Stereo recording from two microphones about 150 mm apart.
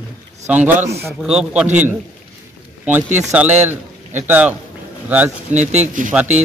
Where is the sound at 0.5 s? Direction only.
10° right (ahead or behind).